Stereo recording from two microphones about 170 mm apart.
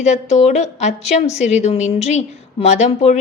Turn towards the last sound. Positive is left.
turn(degrees=40)  # may be behind; listen again after turning